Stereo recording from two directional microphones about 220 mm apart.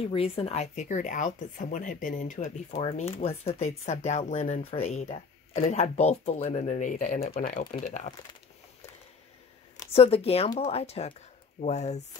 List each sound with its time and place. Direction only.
0.0 s speech: 25° left (ahead or behind)
9.8 s speech: 25° left (ahead or behind)